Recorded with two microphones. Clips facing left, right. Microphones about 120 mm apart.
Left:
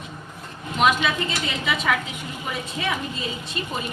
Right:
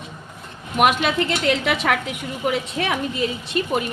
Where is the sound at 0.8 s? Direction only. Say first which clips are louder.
Right 3 dB; 60° right (ahead or behind).